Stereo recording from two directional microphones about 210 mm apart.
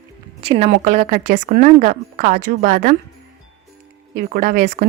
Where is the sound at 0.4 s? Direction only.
30° right (ahead or behind).